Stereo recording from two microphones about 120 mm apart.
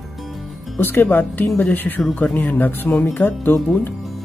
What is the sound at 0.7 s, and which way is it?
Speech, 15° left (ahead or behind).